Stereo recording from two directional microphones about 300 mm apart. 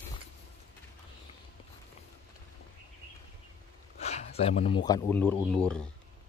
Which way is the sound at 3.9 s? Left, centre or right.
Left.